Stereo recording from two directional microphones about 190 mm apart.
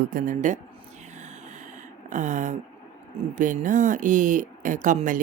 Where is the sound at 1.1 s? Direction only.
40° right (ahead or behind).